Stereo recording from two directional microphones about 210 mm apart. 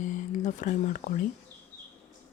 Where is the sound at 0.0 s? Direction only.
35° left (ahead or behind).